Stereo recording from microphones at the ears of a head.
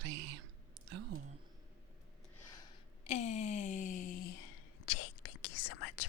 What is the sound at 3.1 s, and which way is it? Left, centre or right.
Speech, left.